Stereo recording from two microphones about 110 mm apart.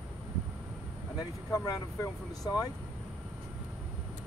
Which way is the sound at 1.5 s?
35° left (ahead or behind).